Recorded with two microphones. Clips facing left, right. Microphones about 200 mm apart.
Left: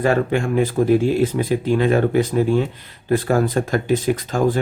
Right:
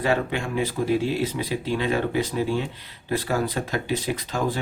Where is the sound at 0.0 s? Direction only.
50° left (ahead or behind).